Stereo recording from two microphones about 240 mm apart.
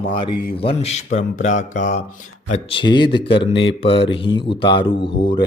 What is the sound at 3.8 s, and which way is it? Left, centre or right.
Speech, left.